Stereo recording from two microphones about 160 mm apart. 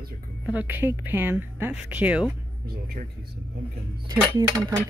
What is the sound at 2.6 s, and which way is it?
Speech, 70° right (ahead or behind).